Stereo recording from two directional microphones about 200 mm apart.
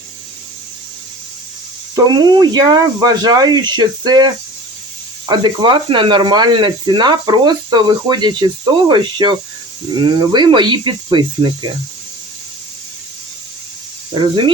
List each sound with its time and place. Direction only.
2.0 s speech: 20° right (ahead or behind)
5.3 s speech: 20° right (ahead or behind)
14.1 s speech: 25° right (ahead or behind)